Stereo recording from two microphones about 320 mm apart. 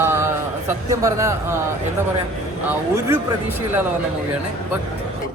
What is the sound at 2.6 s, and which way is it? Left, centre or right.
Speech, centre.